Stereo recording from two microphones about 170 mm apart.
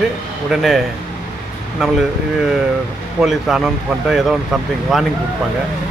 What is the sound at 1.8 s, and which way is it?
Speech, centre (ahead or behind).